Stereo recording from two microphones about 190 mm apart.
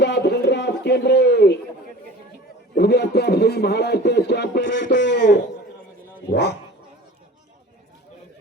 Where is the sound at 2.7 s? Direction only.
60° left (ahead or behind).